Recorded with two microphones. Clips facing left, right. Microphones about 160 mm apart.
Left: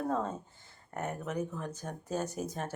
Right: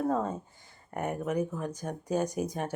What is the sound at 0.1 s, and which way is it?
Speech, 10° right (ahead or behind).